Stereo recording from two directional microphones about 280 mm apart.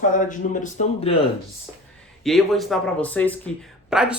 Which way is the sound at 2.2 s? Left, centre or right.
Centre.